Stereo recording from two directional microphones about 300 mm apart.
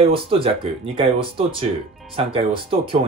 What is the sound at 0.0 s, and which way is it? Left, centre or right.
Speech, centre.